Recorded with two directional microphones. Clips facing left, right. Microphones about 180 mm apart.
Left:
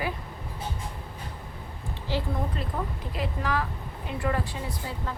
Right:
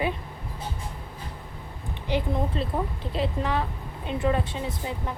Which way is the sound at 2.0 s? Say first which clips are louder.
Right 4 dB; 20° right (ahead or behind).